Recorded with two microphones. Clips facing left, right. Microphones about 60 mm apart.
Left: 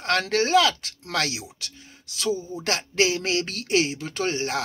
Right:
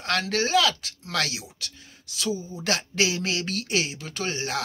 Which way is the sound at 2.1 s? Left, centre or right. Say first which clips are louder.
Left 3 dB; left.